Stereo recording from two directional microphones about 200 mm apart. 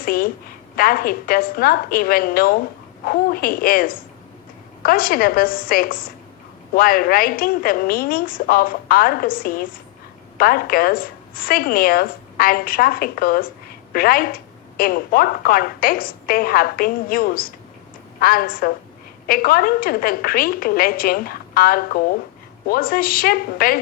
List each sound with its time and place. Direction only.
0.0 s a woman's voice: 45° left (ahead or behind)